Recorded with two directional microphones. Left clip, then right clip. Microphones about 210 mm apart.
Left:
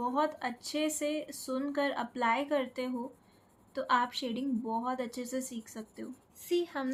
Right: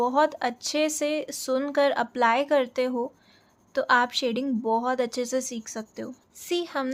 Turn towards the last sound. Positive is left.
turn(degrees=-40)  # may be behind; listen again after turning